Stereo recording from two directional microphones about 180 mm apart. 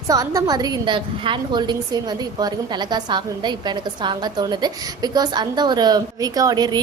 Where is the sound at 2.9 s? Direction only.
25° right (ahead or behind).